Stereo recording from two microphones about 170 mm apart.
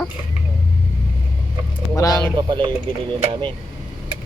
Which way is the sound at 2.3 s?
30° right (ahead or behind).